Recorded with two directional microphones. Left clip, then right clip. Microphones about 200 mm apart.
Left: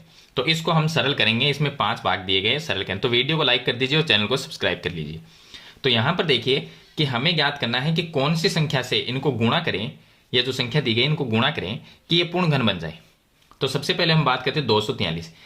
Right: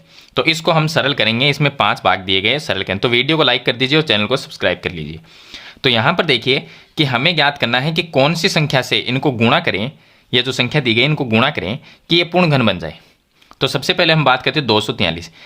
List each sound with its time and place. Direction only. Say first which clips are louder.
0.3 s speech: right 7 dB; 45° right (ahead or behind)
13.6 s speech: right 7 dB; 45° right (ahead or behind)